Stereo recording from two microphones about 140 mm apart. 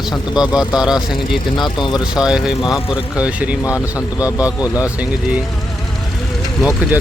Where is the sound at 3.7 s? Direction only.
25° left (ahead or behind).